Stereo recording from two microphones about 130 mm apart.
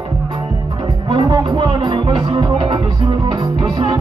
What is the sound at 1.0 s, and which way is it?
Music, 40° right (ahead or behind).